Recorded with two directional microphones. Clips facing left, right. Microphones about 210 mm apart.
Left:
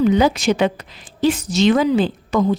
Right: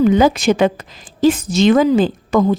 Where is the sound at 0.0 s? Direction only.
50° right (ahead or behind).